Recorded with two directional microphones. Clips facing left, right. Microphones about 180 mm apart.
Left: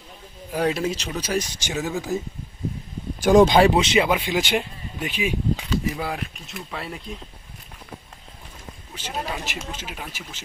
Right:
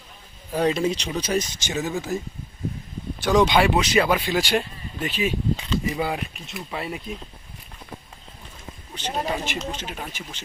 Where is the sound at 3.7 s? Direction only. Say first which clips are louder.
Left 1 dB; 25° left (ahead or behind); by 7.0 s 5° right (ahead or behind).